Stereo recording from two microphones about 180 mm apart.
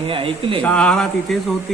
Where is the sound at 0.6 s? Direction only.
5° left (ahead or behind).